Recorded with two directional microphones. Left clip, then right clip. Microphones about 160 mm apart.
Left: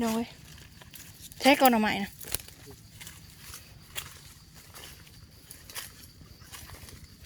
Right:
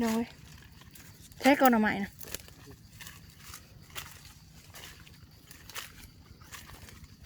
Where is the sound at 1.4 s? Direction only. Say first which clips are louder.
Left 2 dB; 20° right (ahead or behind).